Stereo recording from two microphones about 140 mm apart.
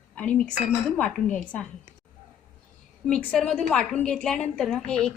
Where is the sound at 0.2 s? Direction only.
10° left (ahead or behind).